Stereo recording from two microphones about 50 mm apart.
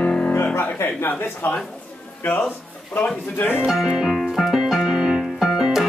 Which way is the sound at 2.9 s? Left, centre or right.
Left.